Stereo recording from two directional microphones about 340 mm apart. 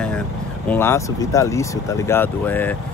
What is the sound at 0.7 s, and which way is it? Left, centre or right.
Speech, centre.